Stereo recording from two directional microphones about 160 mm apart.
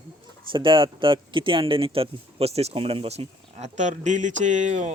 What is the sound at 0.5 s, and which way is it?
Speech, 30° right (ahead or behind).